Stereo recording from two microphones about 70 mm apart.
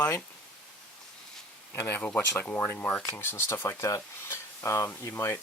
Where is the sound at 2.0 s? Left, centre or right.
Left.